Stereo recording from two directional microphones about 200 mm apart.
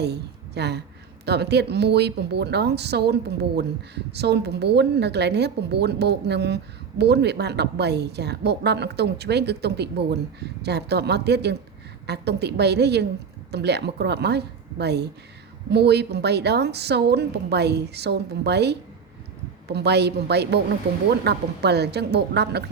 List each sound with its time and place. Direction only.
0.0 s a woman's voice: 55° right (ahead or behind)